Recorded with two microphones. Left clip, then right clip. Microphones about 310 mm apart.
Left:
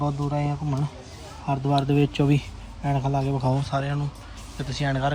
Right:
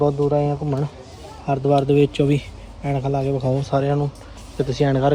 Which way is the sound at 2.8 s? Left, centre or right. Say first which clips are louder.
Right 4 dB; left.